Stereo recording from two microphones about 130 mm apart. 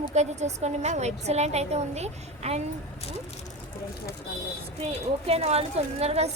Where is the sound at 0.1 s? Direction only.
60° right (ahead or behind).